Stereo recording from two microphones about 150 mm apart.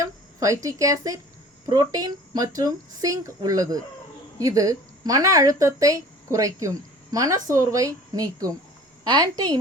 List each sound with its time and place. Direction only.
0.0 s speech: 20° right (ahead or behind)